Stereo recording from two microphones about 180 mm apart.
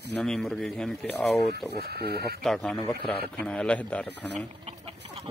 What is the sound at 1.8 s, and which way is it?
Speech, 65° right (ahead or behind).